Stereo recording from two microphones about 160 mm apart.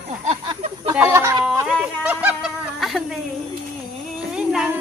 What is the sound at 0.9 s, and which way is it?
Chicken, 15° right (ahead or behind).